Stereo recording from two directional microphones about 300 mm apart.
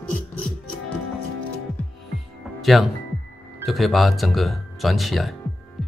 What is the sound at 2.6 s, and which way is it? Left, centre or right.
Music, centre.